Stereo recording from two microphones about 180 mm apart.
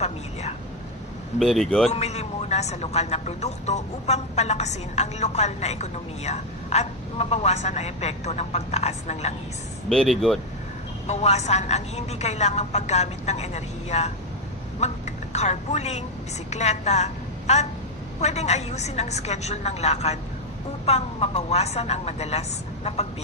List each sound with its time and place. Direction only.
1.4 s speech: centre (ahead or behind)
1.9 s a man's voice: 35° left (ahead or behind)
9.9 s speech: centre (ahead or behind)
11.0 s a man's voice: 40° left (ahead or behind)